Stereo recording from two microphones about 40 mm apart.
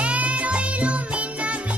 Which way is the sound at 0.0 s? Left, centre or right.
Right.